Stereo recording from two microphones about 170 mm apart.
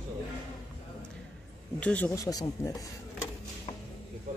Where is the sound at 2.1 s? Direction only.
20° left (ahead or behind).